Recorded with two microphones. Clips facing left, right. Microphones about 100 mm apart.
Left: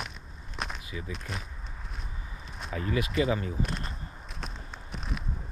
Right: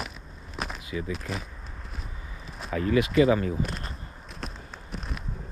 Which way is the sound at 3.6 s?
Centre (ahead or behind).